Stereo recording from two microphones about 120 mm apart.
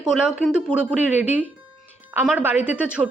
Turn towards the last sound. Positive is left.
turn(degrees=-10)  # may be behind; listen again after turning